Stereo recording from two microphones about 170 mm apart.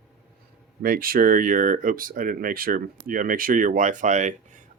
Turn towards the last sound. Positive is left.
turn(degrees=-45)  # may be behind; listen again after turning